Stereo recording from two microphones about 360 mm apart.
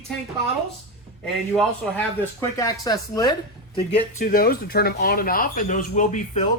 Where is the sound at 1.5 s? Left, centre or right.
Centre.